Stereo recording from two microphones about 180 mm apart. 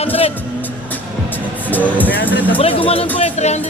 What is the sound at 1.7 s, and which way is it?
Speech, 10° left (ahead or behind).